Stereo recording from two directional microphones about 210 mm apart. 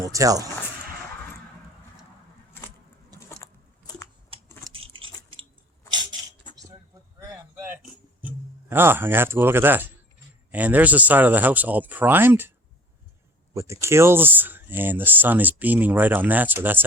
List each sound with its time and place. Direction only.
0.0 s speech: 15° right (ahead or behind)
3.2 s vehicle: 15° left (ahead or behind)
5.0 s squish: 25° right (ahead or behind)
5.9 s a sound: 20° right (ahead or behind)
8.7 s speech: 10° right (ahead or behind)